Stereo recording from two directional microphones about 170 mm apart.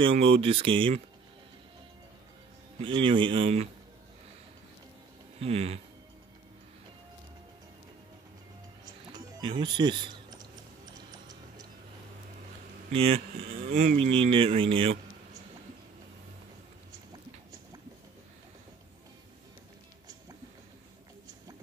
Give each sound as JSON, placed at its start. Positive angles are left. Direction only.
{"t": 0.0, "sound": "speech", "side_deg": -35}
{"t": 2.8, "sound": "speech", "side_deg": -30}
{"t": 5.4, "sound": "speech", "side_deg": -35}
{"t": 8.8, "sound": "music", "side_deg": -25}
{"t": 12.9, "sound": "speech", "side_deg": -35}